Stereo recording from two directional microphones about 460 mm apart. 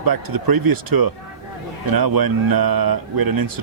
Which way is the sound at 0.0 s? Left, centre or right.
Right.